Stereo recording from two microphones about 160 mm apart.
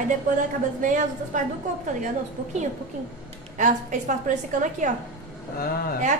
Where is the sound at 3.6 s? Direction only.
50° right (ahead or behind).